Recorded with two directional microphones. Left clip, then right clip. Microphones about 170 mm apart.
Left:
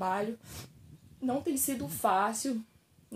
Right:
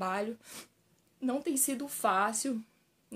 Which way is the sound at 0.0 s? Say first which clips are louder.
Left 2 dB; 15° right (ahead or behind).